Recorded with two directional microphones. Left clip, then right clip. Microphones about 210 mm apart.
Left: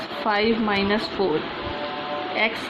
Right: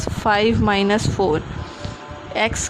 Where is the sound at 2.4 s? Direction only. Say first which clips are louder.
Right 3 dB; 55° right (ahead or behind).